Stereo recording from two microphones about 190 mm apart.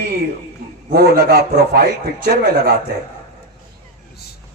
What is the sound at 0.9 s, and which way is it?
A man's voice, 55° right (ahead or behind).